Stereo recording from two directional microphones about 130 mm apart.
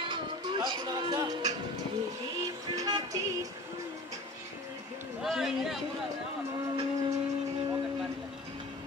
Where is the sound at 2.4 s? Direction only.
25° right (ahead or behind).